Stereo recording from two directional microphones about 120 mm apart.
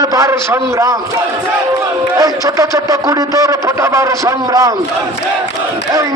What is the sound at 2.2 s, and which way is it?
A man's voice, 25° right (ahead or behind).